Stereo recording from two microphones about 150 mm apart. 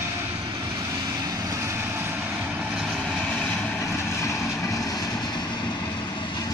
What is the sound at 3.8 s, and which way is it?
Vehicle, 20° left (ahead or behind).